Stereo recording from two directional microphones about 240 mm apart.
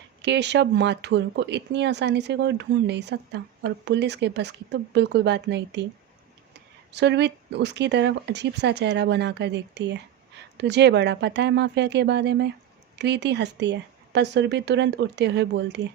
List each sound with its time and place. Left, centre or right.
0.2 s speech: right